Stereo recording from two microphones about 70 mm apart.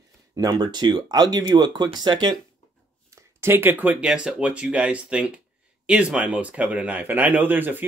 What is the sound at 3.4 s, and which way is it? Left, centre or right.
Speech, right.